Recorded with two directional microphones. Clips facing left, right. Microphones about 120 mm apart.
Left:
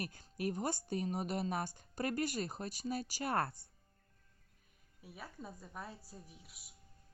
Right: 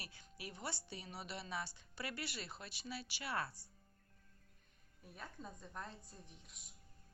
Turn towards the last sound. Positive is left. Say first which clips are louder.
# left 4 dB
turn(degrees=5)  # may be behind; listen again after turning